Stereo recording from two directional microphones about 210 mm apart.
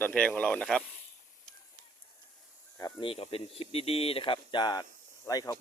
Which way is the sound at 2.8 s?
20° left (ahead or behind).